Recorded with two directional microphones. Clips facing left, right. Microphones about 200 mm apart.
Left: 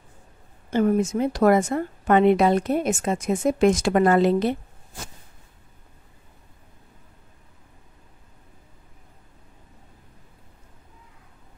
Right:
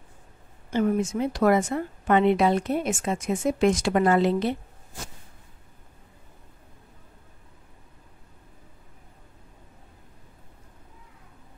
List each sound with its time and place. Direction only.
0.7 s speech: 45° left (ahead or behind)